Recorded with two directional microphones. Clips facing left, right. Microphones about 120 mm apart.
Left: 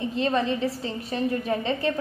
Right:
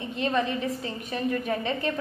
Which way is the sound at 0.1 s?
30° left (ahead or behind).